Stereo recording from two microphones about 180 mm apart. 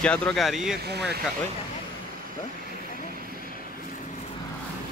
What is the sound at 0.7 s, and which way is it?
Speech, 65° right (ahead or behind).